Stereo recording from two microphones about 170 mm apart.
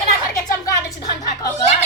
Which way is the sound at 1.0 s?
20° left (ahead or behind).